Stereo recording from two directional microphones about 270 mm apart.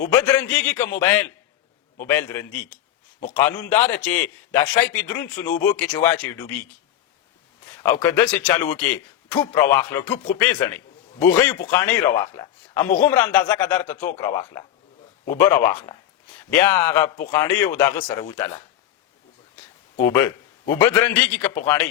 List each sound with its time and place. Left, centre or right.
0.0 s a man's voice: centre
3.2 s a man's voice: left
3.5 s a man's voice: centre
7.8 s a man's voice: centre
19.5 s a sound: centre
20.7 s a man's voice: centre